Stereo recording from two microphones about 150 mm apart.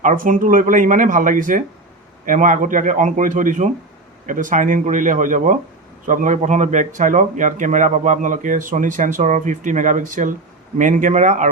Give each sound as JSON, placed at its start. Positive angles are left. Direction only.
{"t": 0.0, "sound": "speech", "side_deg": -60}